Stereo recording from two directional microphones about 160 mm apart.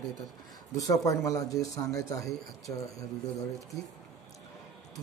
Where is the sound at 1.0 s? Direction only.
20° left (ahead or behind).